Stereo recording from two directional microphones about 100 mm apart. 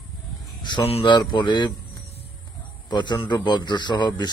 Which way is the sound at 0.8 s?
85° left.